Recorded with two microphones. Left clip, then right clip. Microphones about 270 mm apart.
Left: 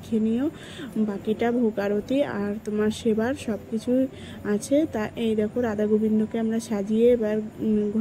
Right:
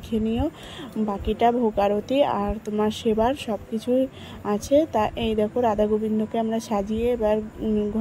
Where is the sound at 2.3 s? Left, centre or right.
Right.